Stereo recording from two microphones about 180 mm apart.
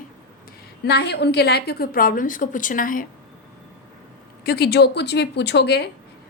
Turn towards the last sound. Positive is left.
turn(degrees=65)  # may be behind; listen again after turning